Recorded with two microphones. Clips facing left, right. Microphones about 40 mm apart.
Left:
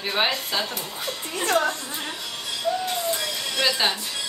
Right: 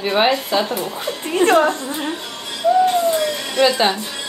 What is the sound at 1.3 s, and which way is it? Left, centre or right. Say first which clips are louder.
Speech: right 9 dB; right.